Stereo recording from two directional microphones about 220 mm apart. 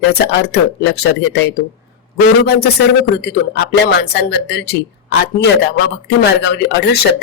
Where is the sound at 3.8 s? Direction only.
50° left (ahead or behind).